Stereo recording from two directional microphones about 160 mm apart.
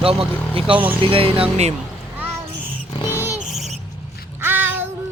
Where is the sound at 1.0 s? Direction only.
35° right (ahead or behind).